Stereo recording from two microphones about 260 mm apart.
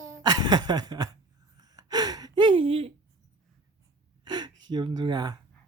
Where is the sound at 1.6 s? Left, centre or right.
Centre.